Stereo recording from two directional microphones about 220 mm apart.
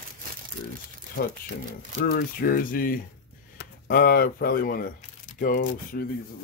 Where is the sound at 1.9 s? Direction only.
40° left (ahead or behind).